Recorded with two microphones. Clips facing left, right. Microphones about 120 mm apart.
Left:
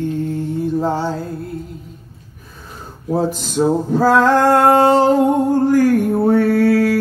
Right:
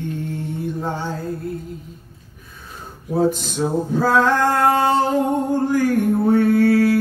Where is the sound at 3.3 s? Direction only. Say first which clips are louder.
Left 5 dB; 45° left (ahead or behind).